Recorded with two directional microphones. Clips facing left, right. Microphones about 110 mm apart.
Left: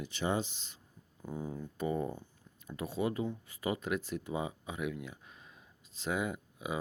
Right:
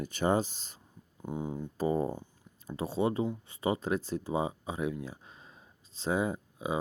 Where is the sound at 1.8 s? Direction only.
30° right (ahead or behind).